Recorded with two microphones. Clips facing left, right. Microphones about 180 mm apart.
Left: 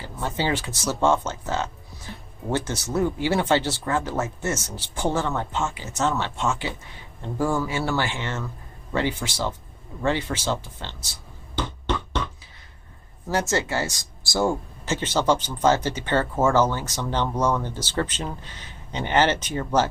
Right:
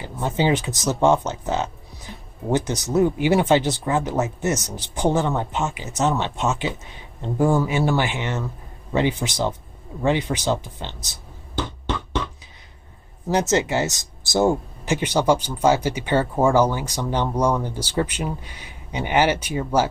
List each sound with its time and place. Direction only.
0.0 s speech: 20° right (ahead or behind)
13.3 s speech: 20° right (ahead or behind)